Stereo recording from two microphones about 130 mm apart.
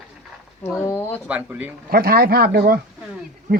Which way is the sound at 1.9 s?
90° right.